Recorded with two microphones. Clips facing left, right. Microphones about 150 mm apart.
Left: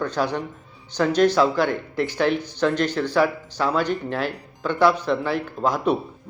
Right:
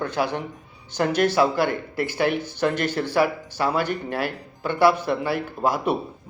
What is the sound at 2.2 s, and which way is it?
Speech, 55° right (ahead or behind).